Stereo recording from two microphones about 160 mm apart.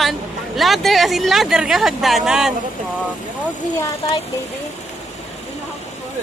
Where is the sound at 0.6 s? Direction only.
Centre (ahead or behind).